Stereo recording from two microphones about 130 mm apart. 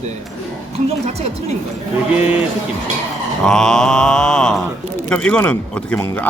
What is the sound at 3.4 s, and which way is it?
Mantra, 5° left (ahead or behind).